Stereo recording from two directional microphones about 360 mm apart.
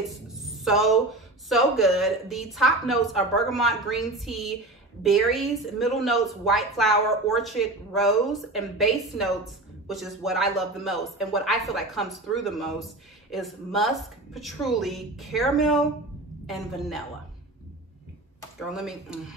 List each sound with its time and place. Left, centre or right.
0.1 s a sound: centre
1.8 s speech: centre
18.6 s speech: centre